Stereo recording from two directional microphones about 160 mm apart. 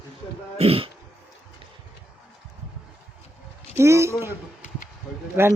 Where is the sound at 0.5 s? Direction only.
40° right (ahead or behind).